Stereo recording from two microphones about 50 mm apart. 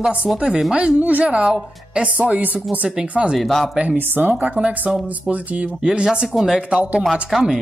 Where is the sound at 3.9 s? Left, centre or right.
Right.